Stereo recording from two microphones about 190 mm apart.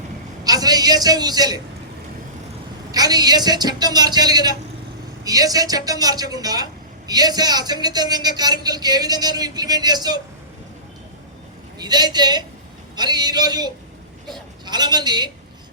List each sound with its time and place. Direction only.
0.4 s a man's voice: 20° right (ahead or behind)
2.9 s speech: 20° right (ahead or behind)
11.8 s a man's voice: 20° right (ahead or behind)